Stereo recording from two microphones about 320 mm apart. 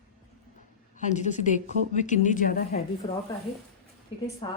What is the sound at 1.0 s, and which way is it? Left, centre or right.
A woman's voice, left.